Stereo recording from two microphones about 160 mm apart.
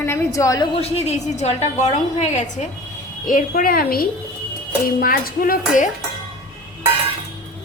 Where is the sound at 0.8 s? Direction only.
40° left (ahead or behind).